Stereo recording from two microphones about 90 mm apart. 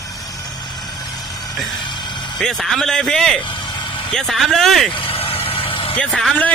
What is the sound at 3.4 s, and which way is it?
Vehicle, 60° left (ahead or behind).